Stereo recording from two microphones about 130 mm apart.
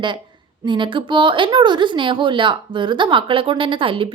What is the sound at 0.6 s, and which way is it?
A woman's voice, 35° right (ahead or behind).